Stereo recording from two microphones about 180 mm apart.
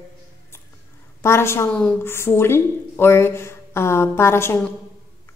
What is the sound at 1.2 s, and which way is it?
A woman's voice, 15° left (ahead or behind).